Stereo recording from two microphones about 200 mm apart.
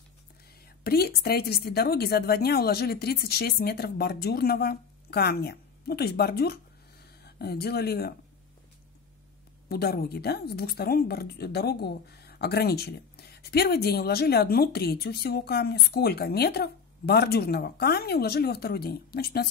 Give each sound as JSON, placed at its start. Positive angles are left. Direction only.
{"t": 0.8, "sound": "a woman's voice", "side_deg": 50}
{"t": 9.7, "sound": "a woman's voice", "side_deg": 50}